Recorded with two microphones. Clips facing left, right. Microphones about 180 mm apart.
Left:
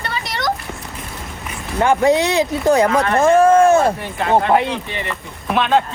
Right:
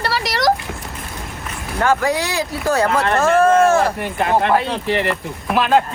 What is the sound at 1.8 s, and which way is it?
Speech, 20° left (ahead or behind).